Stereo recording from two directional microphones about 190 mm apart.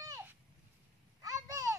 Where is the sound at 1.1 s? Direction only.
20° right (ahead or behind).